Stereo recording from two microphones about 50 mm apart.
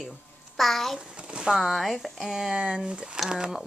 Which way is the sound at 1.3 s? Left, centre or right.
Centre.